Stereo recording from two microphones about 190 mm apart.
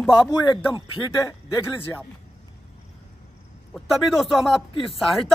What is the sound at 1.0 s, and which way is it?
Speech, 15° left (ahead or behind).